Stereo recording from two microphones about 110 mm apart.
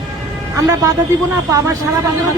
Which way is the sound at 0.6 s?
30° right (ahead or behind).